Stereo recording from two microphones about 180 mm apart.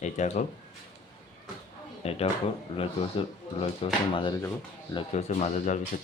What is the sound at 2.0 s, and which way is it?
Speech, 35° left (ahead or behind).